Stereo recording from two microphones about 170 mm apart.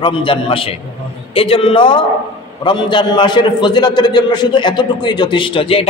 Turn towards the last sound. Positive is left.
turn(degrees=30)  # may be behind; listen again after turning